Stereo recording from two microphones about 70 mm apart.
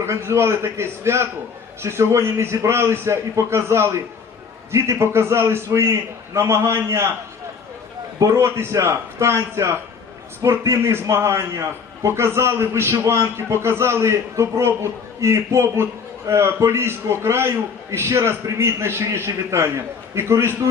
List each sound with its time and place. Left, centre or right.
0.0 s a man's voice: right
8.4 s a man's voice: right